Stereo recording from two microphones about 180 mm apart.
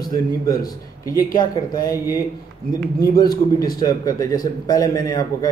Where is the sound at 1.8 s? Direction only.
20° left (ahead or behind).